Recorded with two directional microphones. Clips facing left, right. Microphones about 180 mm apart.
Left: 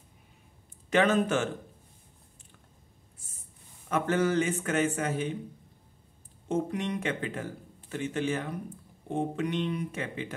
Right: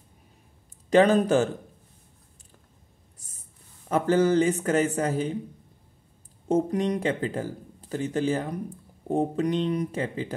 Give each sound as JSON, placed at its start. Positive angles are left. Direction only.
{"t": 0.8, "sound": "speech", "side_deg": -35}
{"t": 3.9, "sound": "speech", "side_deg": -35}
{"t": 6.5, "sound": "speech", "side_deg": -40}